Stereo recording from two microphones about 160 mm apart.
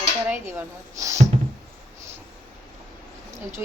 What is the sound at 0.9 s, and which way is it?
Speech, 20° right (ahead or behind).